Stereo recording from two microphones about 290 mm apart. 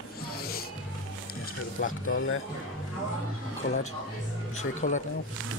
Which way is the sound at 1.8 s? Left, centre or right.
Left.